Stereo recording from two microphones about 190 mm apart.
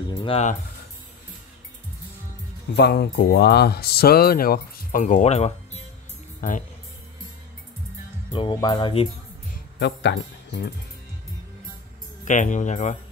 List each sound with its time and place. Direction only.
0.1 s speech: 25° left (ahead or behind)
2.7 s speech: 60° left (ahead or behind); by 5.8 s 35° left (ahead or behind)
8.3 s speech: 25° left (ahead or behind)
9.8 s speech: 65° left (ahead or behind)
12.3 s speech: 40° left (ahead or behind)